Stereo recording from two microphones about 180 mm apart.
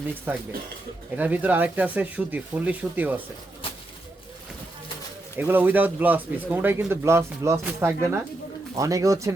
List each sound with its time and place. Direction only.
0.3 s speech: 10° right (ahead or behind)
5.4 s speech: 10° right (ahead or behind)